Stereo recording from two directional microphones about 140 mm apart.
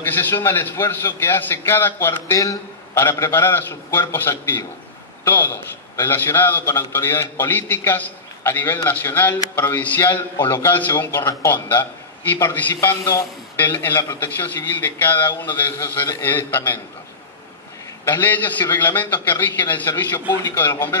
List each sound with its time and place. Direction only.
0.0 s a man's voice: 15° left (ahead or behind)
18.0 s a man's voice: 15° left (ahead or behind)